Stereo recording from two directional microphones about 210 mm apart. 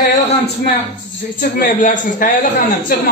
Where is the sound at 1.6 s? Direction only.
40° left (ahead or behind).